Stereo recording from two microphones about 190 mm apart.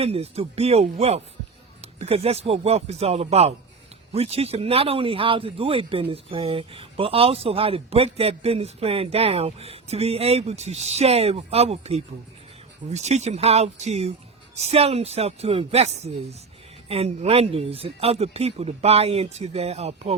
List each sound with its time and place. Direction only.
0.0 s speech: 30° right (ahead or behind)